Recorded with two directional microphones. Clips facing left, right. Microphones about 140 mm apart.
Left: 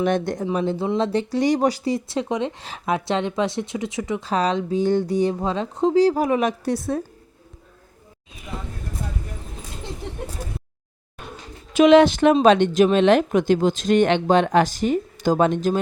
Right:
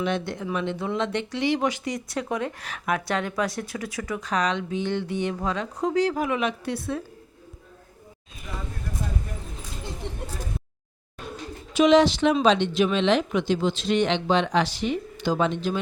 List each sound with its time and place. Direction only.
0.0 s speech: 45° left (ahead or behind)
0.5 s speech: 35° left (ahead or behind)
11.7 s speech: 55° left (ahead or behind)